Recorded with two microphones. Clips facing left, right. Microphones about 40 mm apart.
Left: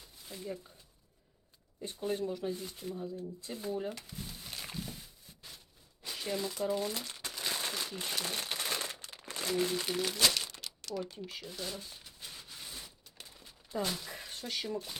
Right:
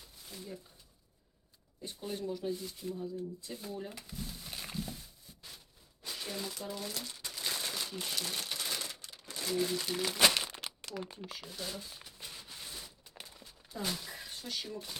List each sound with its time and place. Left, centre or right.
0.0 s a sound: centre
1.9 s speech: centre
4.1 s a sound: centre
6.0 s speech: centre
7.2 s crumpling: left
7.4 s crumpling: centre; by 9.5 s left
9.6 s speech: centre
10.2 s crumpling: right
11.3 s a sound: centre
14.4 s speech: left